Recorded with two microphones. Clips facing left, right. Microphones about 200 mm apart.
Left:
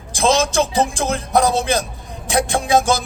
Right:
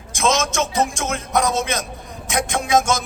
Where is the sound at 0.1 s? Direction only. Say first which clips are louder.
Left 3 dB; 35° left (ahead or behind).